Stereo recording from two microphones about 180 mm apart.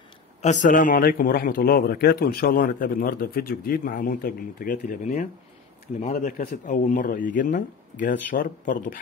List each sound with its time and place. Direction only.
0.4 s a man's voice: 40° left (ahead or behind)